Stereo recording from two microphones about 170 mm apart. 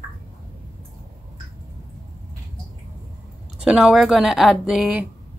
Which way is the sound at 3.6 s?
5° right (ahead or behind).